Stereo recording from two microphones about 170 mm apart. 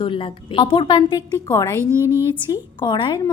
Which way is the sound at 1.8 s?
15° right (ahead or behind).